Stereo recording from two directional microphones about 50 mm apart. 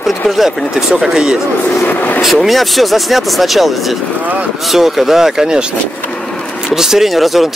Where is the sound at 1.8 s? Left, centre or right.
Left.